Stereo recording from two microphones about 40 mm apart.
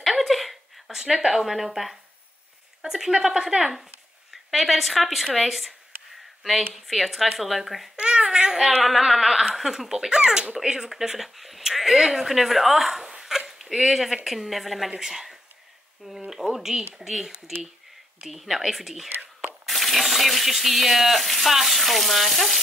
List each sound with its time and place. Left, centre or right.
0.0 s a sound: centre
2.8 s speech: centre
7.9 s babbling: centre
8.8 s speech: centre
16.3 s a sound: centre
17.0 s speech: centre